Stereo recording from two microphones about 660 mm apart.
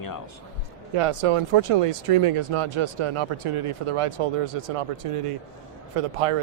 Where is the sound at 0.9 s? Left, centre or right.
Right.